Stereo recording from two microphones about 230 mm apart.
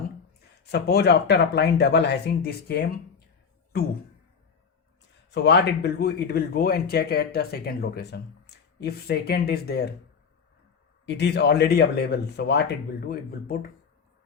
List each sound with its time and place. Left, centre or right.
0.7 s speech: left
5.3 s speech: left
11.0 s speech: left